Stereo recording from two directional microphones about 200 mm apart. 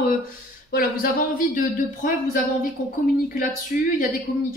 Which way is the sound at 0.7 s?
50° left (ahead or behind).